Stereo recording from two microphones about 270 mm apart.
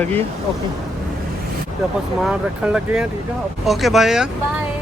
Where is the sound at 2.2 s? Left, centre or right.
Centre.